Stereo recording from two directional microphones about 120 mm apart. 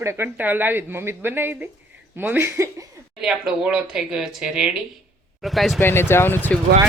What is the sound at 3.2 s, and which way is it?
Speech, 5° right (ahead or behind).